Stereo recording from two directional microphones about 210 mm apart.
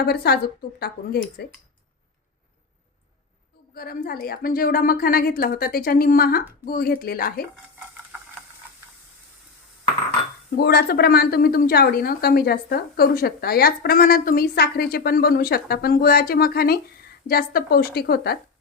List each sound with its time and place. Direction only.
0.0 s a woman's voice: 50° left (ahead or behind)
1.4 s a woman's voice: 50° left (ahead or behind)
3.8 s a woman's voice: 45° left (ahead or behind)
10.6 s a woman's voice: 50° left (ahead or behind)